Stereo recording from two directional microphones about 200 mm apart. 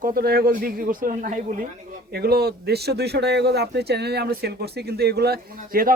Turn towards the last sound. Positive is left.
turn(degrees=-45)  # may be behind; listen again after turning